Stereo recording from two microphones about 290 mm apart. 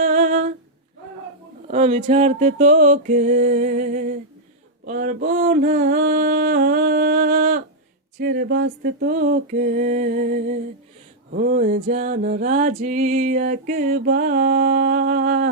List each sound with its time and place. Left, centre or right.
0.0 s humming: right
1.6 s music: right
8.2 s a sound: right
8.8 s music: right